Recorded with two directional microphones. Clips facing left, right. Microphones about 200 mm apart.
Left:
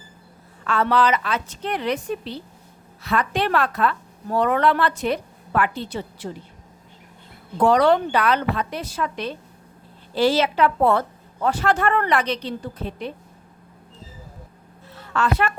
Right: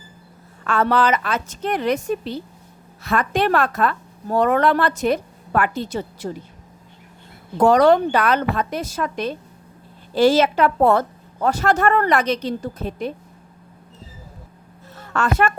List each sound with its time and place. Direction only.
0.6 s a woman's voice: 50° right (ahead or behind)
7.6 s a woman's voice: 45° right (ahead or behind)
14.9 s a sound: 45° right (ahead or behind)